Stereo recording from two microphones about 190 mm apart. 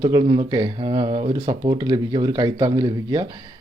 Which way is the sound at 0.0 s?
25° right (ahead or behind).